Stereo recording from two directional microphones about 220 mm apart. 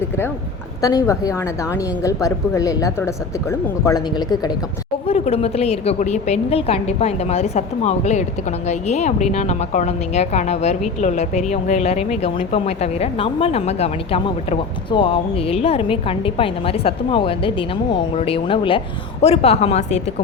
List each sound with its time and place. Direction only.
0.8 s a woman's voice: 15° left (ahead or behind)